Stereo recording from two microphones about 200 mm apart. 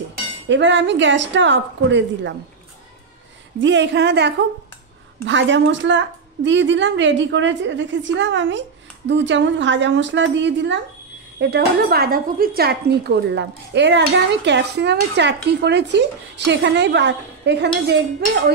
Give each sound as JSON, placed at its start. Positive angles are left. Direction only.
{"t": 0.5, "sound": "speech", "side_deg": -65}
{"t": 3.6, "sound": "speech", "side_deg": -65}